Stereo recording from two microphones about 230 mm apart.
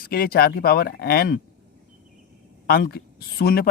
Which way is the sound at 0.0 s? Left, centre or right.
Left.